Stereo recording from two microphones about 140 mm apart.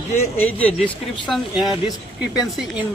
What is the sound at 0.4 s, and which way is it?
Speech, 10° left (ahead or behind).